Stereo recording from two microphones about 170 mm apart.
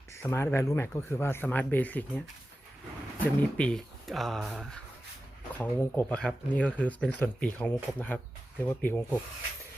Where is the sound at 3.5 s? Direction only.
5° left (ahead or behind).